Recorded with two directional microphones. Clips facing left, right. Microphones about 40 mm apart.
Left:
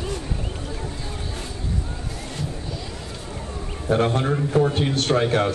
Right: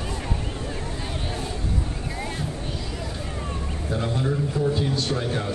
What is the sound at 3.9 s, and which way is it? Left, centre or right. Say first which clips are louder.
A man's voice: left 6 dB; left.